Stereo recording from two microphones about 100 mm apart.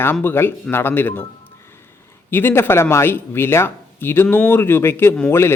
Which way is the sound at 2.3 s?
20° left (ahead or behind).